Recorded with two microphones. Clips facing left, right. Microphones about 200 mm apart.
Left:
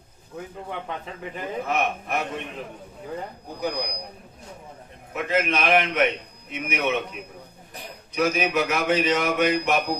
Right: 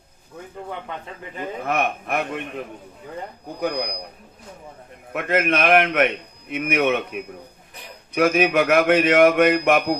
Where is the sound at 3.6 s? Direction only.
60° right (ahead or behind).